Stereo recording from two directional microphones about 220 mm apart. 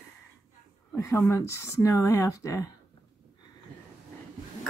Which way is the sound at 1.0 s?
15° left (ahead or behind).